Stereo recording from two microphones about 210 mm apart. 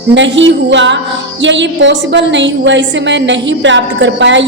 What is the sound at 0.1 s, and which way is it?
A woman's voice, 60° right (ahead or behind).